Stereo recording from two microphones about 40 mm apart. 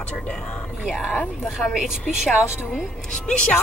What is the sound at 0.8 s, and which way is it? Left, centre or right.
Speech, centre.